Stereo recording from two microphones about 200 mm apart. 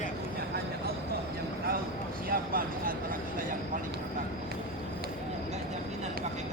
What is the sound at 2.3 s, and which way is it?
Speech, 45° right (ahead or behind).